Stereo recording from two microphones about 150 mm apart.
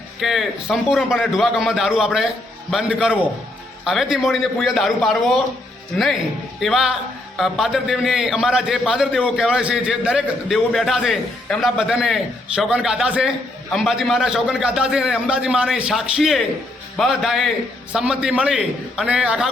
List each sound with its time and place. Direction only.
0.2 s a man's voice: centre (ahead or behind)
6.6 s a man's voice: centre (ahead or behind)